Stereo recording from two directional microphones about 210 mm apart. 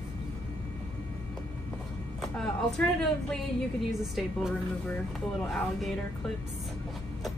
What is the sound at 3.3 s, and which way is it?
A woman's voice, centre (ahead or behind).